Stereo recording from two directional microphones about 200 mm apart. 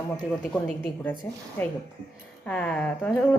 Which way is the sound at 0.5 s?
5° left (ahead or behind).